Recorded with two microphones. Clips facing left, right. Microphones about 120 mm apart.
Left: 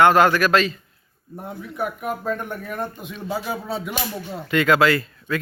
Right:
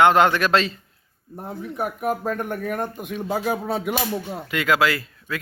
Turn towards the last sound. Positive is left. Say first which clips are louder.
# left 4 dB
turn(degrees=-5)  # may be behind; listen again after turning